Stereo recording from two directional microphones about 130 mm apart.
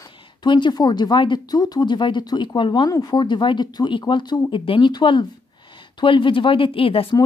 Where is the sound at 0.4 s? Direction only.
35° left (ahead or behind).